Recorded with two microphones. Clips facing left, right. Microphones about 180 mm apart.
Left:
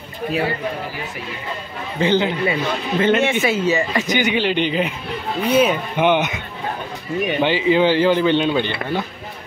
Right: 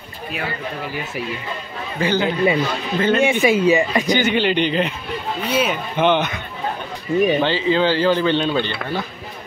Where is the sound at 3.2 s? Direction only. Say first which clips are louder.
Right 3 dB; 15° right (ahead or behind).